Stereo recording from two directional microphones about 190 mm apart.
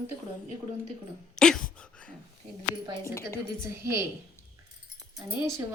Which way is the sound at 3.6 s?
15° right (ahead or behind).